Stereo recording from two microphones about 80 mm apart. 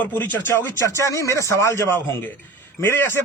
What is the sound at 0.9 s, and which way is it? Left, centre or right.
A man's voice, left.